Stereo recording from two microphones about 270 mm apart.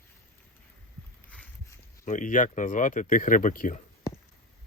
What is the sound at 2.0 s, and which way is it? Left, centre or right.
Speech, left.